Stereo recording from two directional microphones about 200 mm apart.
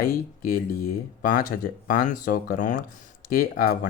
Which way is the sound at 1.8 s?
40° left (ahead or behind).